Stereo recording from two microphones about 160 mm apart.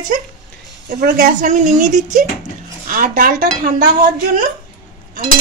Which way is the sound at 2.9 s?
60° right (ahead or behind).